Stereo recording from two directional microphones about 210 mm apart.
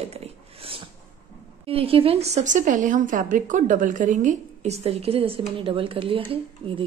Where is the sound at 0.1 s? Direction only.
30° right (ahead or behind).